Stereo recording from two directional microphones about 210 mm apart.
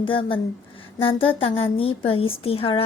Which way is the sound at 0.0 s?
25° left (ahead or behind).